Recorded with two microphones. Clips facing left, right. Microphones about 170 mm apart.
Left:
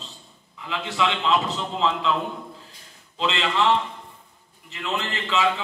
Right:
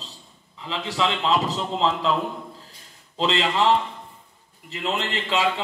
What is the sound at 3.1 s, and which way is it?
Speech, 35° right (ahead or behind).